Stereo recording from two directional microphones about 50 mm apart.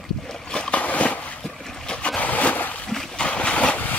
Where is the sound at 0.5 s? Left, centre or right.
Left.